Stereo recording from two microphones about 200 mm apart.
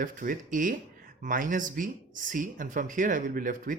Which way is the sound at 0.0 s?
45° right (ahead or behind).